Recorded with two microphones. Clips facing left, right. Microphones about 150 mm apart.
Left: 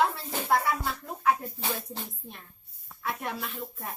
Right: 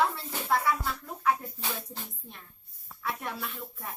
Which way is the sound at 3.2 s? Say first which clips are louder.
Left 2 dB; 15° left (ahead or behind).